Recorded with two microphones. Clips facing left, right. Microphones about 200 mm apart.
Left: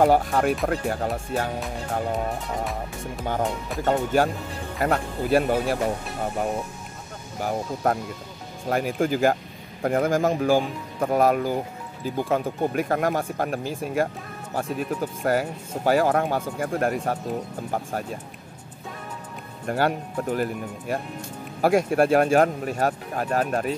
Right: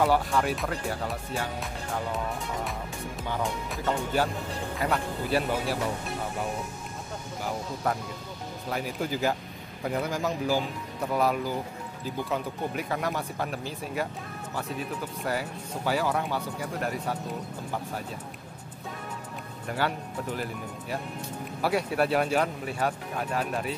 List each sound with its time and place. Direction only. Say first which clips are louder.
0.0 s speech: left 5 dB; 50° left (ahead or behind)
3.8 s speech: left 6 dB; 50° left (ahead or behind)
7.4 s speech: left 6 dB; 50° left (ahead or behind)
19.7 s speech: left 6 dB; 45° left (ahead or behind)
21.5 s speech: left 7 dB; 45° left (ahead or behind)